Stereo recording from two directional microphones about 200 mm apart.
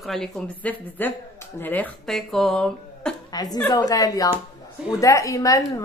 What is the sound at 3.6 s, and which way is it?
A woman's voice, 20° left (ahead or behind).